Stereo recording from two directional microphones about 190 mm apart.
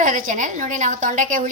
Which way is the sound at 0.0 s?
45° right (ahead or behind).